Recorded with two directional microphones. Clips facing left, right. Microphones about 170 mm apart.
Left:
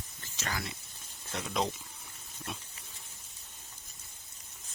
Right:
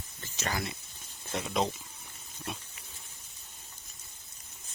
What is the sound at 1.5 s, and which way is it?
Speech, centre (ahead or behind).